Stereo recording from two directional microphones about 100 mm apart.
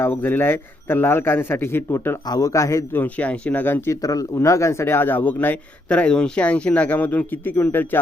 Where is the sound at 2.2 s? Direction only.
40° left (ahead or behind).